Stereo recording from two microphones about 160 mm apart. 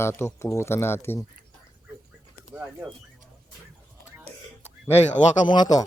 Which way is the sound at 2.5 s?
5° right (ahead or behind).